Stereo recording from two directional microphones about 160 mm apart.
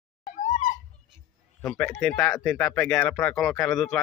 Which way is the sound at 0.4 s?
50° left (ahead or behind).